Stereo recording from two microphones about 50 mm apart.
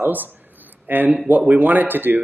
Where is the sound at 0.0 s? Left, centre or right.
Right.